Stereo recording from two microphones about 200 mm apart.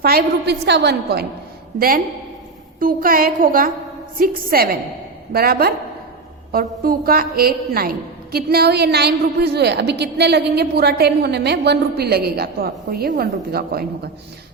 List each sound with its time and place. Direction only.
0.0 s a woman's voice: 50° right (ahead or behind)
2.7 s a woman's voice: 45° right (ahead or behind)